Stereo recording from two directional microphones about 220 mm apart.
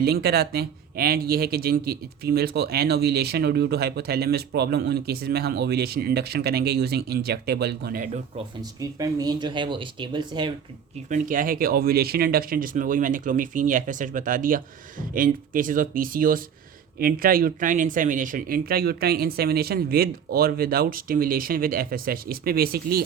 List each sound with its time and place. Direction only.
0.0 s speech: 45° right (ahead or behind)
8.8 s speech: 15° right (ahead or behind)
11.1 s speech: 40° right (ahead or behind)